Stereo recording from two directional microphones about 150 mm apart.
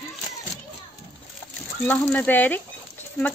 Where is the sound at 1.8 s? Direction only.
10° left (ahead or behind).